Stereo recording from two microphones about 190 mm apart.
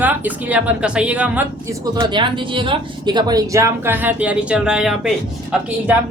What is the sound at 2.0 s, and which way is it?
Speech, 25° right (ahead or behind).